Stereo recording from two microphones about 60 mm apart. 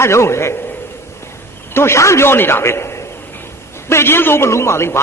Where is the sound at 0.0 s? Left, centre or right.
Left.